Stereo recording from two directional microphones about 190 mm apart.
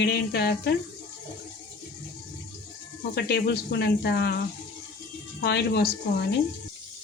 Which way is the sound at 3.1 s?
60° left (ahead or behind).